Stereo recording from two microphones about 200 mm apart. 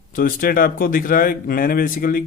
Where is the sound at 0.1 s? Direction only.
45° left (ahead or behind).